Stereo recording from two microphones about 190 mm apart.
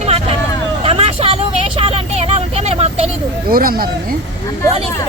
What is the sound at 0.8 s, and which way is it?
Vehicle, 30° right (ahead or behind).